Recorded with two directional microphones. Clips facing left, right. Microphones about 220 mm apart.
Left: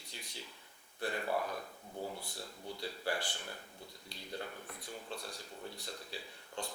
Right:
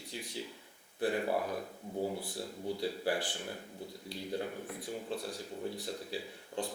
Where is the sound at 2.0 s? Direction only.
30° right (ahead or behind).